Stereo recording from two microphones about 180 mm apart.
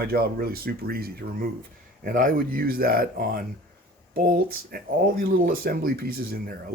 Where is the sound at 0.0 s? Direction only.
55° right (ahead or behind).